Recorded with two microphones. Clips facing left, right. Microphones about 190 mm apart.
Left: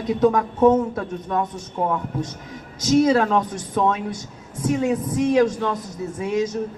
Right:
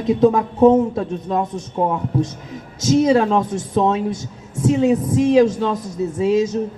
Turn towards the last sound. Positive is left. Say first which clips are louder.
# right 6 dB
turn(degrees=-25)  # may be behind; listen again after turning